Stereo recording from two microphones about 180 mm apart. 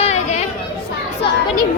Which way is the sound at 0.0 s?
40° left (ahead or behind).